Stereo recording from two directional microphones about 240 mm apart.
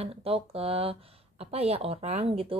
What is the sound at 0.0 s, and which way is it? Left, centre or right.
Speech, right.